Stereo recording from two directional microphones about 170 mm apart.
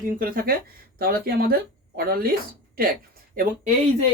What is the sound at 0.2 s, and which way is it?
Speech, 60° right (ahead or behind).